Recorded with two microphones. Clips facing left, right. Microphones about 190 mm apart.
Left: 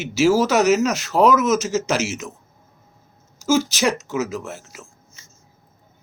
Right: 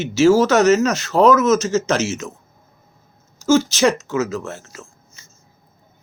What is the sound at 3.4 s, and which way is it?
A man's voice, 10° left (ahead or behind).